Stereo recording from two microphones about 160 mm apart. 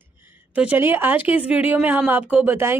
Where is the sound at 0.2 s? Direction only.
10° right (ahead or behind).